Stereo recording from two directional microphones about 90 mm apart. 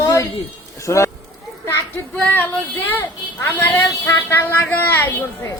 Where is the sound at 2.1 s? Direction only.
15° left (ahead or behind).